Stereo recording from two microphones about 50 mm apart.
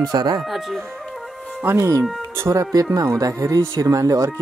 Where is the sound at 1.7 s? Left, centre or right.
Right.